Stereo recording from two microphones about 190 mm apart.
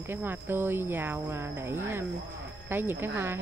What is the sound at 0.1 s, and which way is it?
Speech, 10° right (ahead or behind).